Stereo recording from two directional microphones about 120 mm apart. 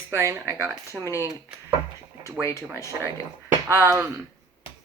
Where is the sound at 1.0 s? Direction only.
25° left (ahead or behind).